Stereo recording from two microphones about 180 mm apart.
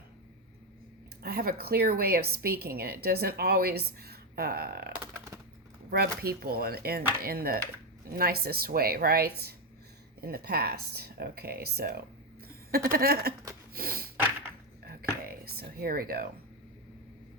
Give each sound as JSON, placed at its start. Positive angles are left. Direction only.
{"t": 1.2, "sound": "a woman's voice", "side_deg": -60}
{"t": 13.7, "sound": "snort", "side_deg": -55}
{"t": 15.3, "sound": "speech", "side_deg": -55}